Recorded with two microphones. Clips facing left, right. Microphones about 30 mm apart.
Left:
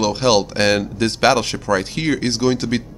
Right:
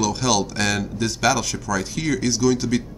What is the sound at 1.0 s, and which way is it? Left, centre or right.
Speech, left.